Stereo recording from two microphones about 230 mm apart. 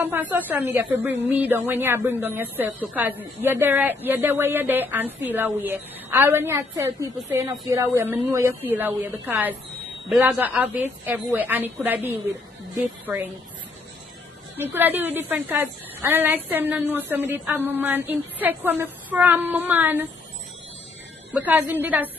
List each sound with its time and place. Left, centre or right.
0.0 s a woman's voice: centre
14.6 s a woman's voice: centre
21.3 s a woman's voice: centre